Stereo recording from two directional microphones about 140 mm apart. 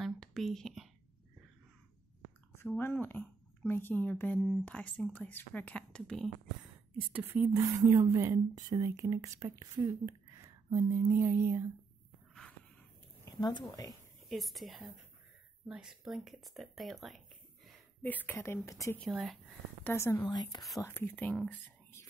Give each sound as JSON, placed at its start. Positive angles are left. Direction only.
{"t": 0.0, "sound": "a sound", "side_deg": 0}
{"t": 2.8, "sound": "a woman's voice", "side_deg": 15}
{"t": 7.0, "sound": "speech", "side_deg": -15}
{"t": 7.5, "sound": "speech", "side_deg": -25}
{"t": 13.2, "sound": "speech", "side_deg": 30}
{"t": 14.3, "sound": "speech", "side_deg": 0}
{"t": 18.0, "sound": "a woman's voice", "side_deg": 10}
{"t": 18.9, "sound": "speech", "side_deg": 0}
{"t": 19.8, "sound": "a woman's voice", "side_deg": 15}
{"t": 20.8, "sound": "speech", "side_deg": 15}